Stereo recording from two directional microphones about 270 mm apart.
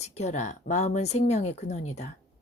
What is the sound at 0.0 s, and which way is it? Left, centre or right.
Speech, left.